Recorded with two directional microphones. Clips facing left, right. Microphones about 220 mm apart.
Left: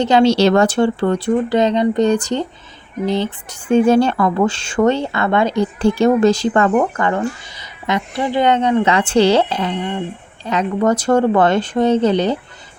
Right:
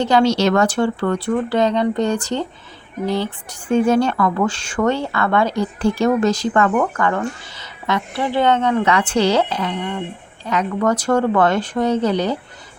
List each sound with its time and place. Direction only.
0.0 s speech: 25° left (ahead or behind)